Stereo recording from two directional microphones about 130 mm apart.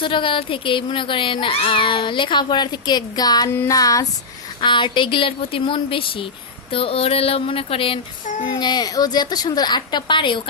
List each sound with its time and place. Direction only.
0.0 s a woman's voice: 40° left (ahead or behind)
3.7 s female singing: 25° left (ahead or behind)
4.6 s a woman's voice: 35° left (ahead or behind)
8.4 s a woman's voice: 35° left (ahead or behind)